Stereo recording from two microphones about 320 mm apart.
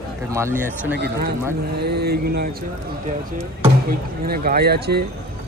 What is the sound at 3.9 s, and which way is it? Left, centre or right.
Speech, right.